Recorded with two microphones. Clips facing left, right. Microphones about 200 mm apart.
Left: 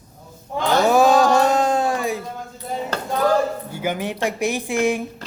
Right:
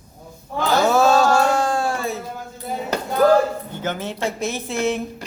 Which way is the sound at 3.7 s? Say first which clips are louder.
Left 2 dB; 10° left (ahead or behind).